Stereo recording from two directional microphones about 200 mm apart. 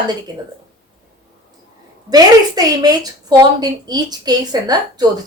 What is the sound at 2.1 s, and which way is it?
A woman's voice, 20° right (ahead or behind).